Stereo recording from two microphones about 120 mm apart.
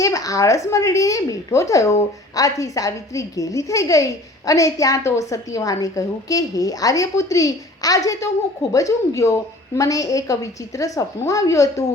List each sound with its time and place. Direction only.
0.0 s a woman's voice: 30° left (ahead or behind)